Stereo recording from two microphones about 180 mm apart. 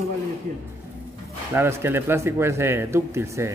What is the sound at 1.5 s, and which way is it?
Speech, 15° right (ahead or behind).